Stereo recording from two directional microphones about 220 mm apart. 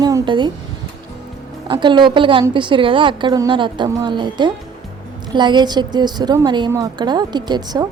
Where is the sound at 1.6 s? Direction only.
20° right (ahead or behind).